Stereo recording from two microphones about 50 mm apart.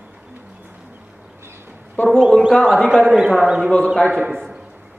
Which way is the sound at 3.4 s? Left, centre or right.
Centre.